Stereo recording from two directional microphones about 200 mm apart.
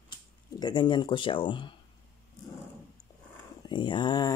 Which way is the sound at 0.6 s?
20° left (ahead or behind).